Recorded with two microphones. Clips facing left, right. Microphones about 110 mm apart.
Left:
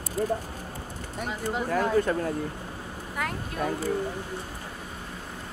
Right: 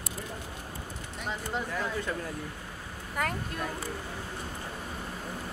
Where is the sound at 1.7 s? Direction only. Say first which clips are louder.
Left 9 dB; 55° left (ahead or behind).